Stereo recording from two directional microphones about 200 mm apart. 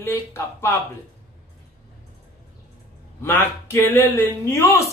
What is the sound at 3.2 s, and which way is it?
Speech, 10° left (ahead or behind).